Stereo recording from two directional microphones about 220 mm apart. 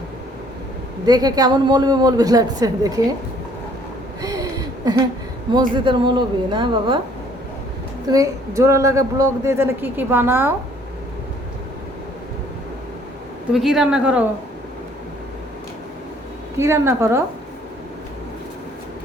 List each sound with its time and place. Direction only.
1.0 s a woman's voice: 15° right (ahead or behind)
4.2 s a sound: 15° right (ahead or behind)
5.5 s speech: 20° right (ahead or behind)
8.1 s a woman's voice: 15° right (ahead or behind)
13.5 s a woman's voice: centre (ahead or behind)
16.6 s a woman's voice: 10° right (ahead or behind)